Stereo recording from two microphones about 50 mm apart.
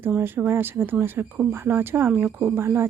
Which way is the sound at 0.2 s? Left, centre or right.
Right.